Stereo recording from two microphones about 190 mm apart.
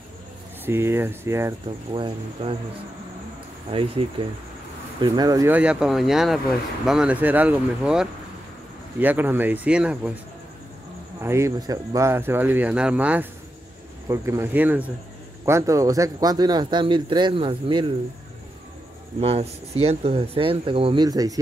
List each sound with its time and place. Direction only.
0.7 s speech: 10° right (ahead or behind)
1.9 s speech: 25° right (ahead or behind)
3.7 s speech: 30° right (ahead or behind)
5.0 s speech: 20° right (ahead or behind); by 10.1 s 5° right (ahead or behind)
11.2 s speech: 15° right (ahead or behind)
19.1 s speech: 35° right (ahead or behind)